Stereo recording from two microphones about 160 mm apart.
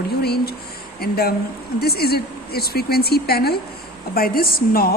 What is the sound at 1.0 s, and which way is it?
Speech, 75° left (ahead or behind).